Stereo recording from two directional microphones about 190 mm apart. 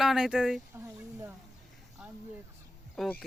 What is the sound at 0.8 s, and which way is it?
Speech, 15° right (ahead or behind).